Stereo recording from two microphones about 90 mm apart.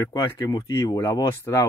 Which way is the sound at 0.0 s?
45° left (ahead or behind).